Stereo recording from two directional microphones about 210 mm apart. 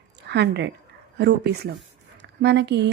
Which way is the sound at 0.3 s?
55° right (ahead or behind).